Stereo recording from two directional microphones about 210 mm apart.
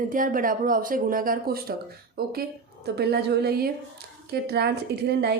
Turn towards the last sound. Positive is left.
turn(degrees=-50)  # may be behind; listen again after turning